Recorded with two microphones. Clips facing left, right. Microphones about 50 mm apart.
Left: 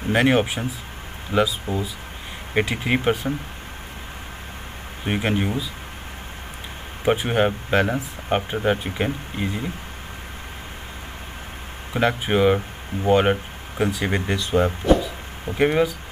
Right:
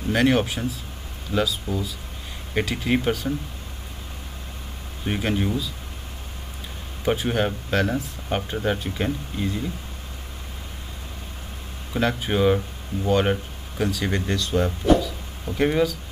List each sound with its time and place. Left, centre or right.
0.1 s speech: left
5.0 s speech: left
7.1 s speech: left
11.9 s speech: left